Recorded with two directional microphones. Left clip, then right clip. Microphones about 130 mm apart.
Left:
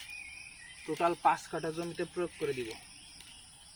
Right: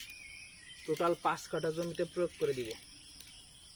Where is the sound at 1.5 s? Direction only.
5° left (ahead or behind).